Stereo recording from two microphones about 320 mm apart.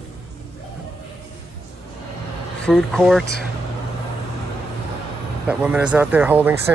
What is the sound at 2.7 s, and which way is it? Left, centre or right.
Speech, centre.